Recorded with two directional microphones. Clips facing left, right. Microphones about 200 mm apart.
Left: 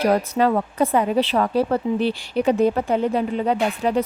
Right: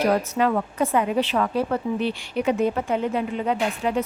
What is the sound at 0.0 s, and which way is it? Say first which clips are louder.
A woman's voice: left 2 dB; 35° left (ahead or behind).